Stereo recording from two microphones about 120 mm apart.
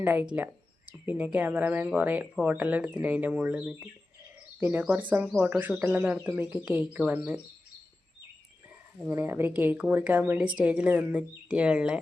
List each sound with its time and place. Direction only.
0.0 s a woman's voice: 15° right (ahead or behind)
9.0 s a woman's voice: 20° right (ahead or behind)